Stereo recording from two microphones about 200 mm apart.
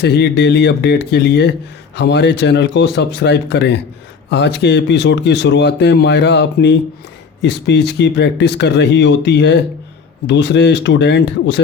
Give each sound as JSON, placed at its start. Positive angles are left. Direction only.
{"t": 0.0, "sound": "speech", "side_deg": 60}